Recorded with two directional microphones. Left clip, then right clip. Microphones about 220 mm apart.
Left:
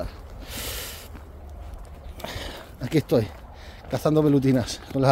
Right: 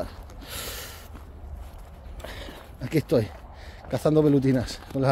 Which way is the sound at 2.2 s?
35° left (ahead or behind).